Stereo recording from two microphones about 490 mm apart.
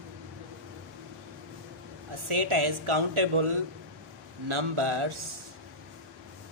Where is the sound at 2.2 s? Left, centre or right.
Right.